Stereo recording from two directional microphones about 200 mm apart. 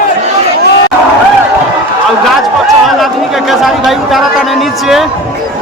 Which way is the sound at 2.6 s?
Centre (ahead or behind).